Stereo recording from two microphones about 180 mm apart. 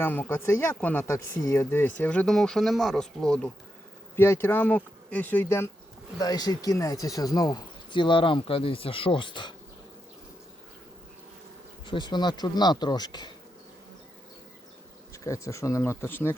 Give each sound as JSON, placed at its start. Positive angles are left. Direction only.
{"t": 0.0, "sound": "speech", "side_deg": 10}
{"t": 11.9, "sound": "speech", "side_deg": 25}
{"t": 15.1, "sound": "speech", "side_deg": 15}